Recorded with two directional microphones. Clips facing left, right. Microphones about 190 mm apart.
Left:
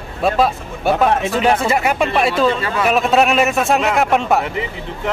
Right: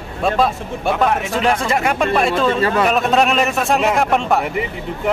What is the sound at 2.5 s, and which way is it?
Speech, 40° right (ahead or behind).